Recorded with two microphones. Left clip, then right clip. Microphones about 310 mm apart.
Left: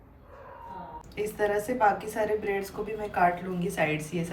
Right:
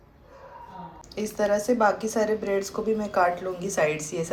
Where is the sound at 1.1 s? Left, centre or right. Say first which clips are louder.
Right 3 dB; centre.